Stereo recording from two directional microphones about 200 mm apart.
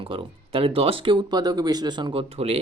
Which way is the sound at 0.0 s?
25° right (ahead or behind).